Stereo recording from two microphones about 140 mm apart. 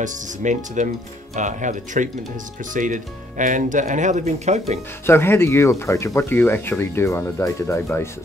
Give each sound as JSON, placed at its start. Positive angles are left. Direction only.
{"t": 0.0, "sound": "speech", "side_deg": -65}
{"t": 5.0, "sound": "speech", "side_deg": 15}